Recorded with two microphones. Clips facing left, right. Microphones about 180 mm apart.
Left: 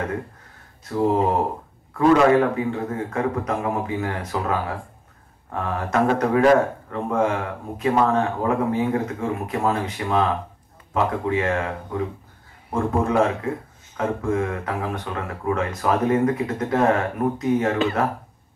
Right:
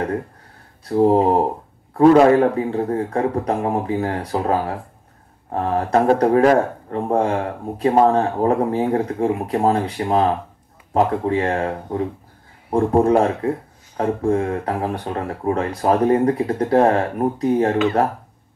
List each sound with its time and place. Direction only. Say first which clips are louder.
0.8 s speech: right 5 dB; 35° right (ahead or behind)